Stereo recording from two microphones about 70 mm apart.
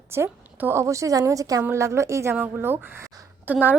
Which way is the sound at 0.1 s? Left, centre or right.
Right.